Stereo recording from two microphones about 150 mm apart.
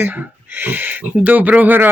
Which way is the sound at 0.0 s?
10° right (ahead or behind).